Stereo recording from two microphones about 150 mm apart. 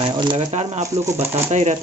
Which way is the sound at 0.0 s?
30° right (ahead or behind).